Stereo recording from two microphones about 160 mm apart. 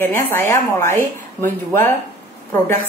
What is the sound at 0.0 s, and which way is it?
A woman's voice, 15° left (ahead or behind).